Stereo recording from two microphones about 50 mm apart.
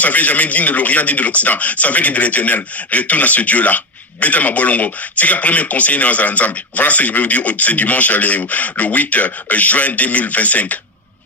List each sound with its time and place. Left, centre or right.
0.0 s speech: left